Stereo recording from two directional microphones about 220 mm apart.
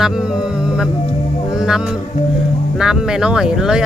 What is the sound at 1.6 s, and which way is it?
Music, 5° right (ahead or behind).